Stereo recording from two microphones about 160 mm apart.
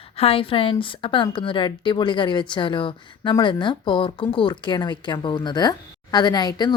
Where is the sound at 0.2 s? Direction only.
35° left (ahead or behind).